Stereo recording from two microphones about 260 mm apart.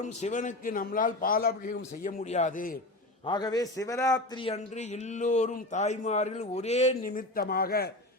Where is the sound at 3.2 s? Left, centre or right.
Centre; by 7.9 s left.